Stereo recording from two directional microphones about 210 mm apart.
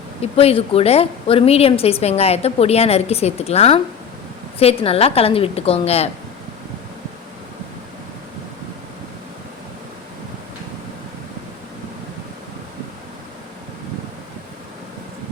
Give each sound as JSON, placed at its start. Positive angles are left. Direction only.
{"t": 0.2, "sound": "a woman's voice", "side_deg": 30}